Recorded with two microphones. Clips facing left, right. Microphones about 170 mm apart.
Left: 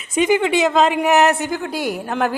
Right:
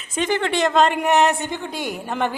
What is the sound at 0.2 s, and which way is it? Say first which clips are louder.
A man's voice: left 5 dB; 10° left (ahead or behind).